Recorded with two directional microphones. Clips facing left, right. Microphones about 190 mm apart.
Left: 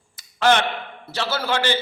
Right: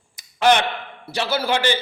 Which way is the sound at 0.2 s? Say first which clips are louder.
Right 1 dB; 15° right (ahead or behind).